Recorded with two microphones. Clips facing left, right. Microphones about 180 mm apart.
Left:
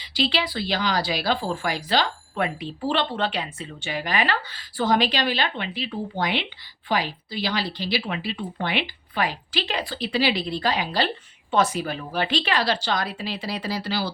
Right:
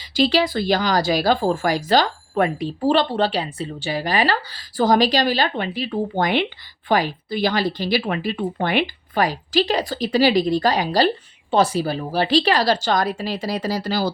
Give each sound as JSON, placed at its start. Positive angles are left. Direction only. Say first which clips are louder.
{"t": 0.1, "sound": "a woman's voice", "louder": "right 7 dB", "side_deg": -45}